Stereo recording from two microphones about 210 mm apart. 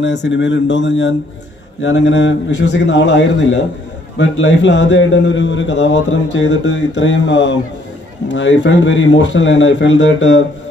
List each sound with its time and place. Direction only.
0.0 s a man's voice: 55° left (ahead or behind)